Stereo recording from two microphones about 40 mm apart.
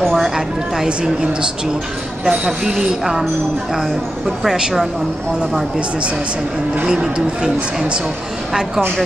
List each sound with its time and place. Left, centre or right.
2.2 s speech: centre
6.9 s speech: centre